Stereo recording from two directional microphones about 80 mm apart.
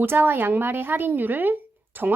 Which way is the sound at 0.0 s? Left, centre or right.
Right.